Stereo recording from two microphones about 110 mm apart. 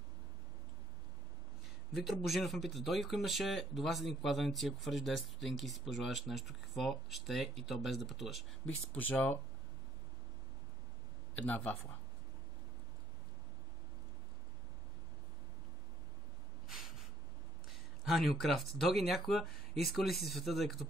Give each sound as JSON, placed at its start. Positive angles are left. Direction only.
{"t": 2.0, "sound": "speech", "side_deg": 0}
{"t": 8.6, "sound": "speech", "side_deg": 15}
{"t": 11.3, "sound": "speech", "side_deg": 15}
{"t": 18.0, "sound": "speech", "side_deg": 0}